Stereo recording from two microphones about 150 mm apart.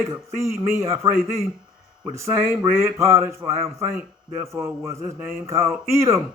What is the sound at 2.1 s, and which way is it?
A man's voice, 20° right (ahead or behind).